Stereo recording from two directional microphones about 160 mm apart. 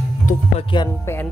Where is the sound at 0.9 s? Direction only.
15° left (ahead or behind).